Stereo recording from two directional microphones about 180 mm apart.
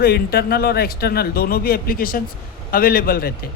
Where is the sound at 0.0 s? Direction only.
60° left (ahead or behind).